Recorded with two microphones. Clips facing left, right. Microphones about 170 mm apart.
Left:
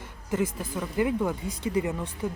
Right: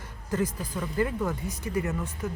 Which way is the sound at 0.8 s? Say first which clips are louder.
Left 2 dB; 15° left (ahead or behind).